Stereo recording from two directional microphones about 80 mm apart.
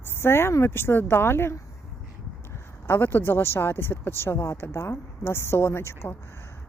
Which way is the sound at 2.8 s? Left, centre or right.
Left.